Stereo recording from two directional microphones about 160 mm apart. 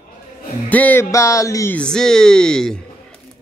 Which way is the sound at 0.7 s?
10° left (ahead or behind).